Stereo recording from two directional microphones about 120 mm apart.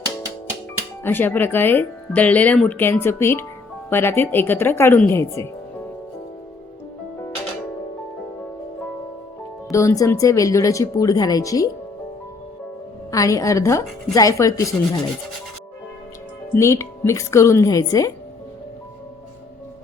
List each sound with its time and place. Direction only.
1.0 s a woman's voice: 15° left (ahead or behind)
9.7 s a woman's voice: 25° left (ahead or behind)
13.1 s a woman's voice: 25° left (ahead or behind)
16.6 s a woman's voice: 25° left (ahead or behind)